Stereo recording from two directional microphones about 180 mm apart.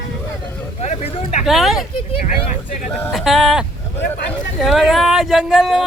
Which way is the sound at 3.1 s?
Centre (ahead or behind).